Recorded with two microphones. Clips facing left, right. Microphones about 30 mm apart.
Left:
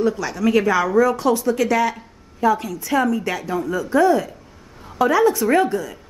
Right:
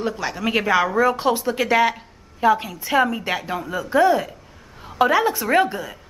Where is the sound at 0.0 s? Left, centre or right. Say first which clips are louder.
Left 4 dB; right.